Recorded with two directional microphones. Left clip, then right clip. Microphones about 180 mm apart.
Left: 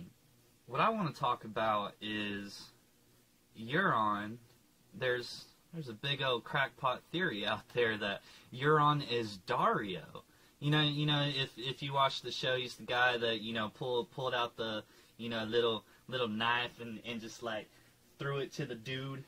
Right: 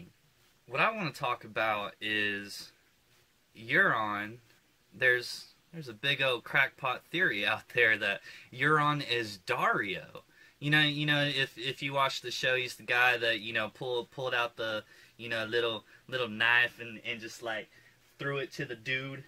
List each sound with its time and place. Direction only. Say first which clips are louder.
0.7 s speech: right 2 dB; 40° right (ahead or behind)
3.6 s speech: right 4 dB; 40° right (ahead or behind)
13.7 s speech: right 1 dB; 10° right (ahead or behind)
14.2 s speech: right 3 dB; 40° right (ahead or behind)
18.1 s a sound: right 4 dB; 40° right (ahead or behind)